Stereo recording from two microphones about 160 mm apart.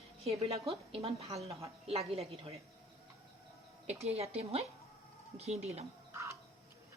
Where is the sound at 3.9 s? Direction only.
40° right (ahead or behind).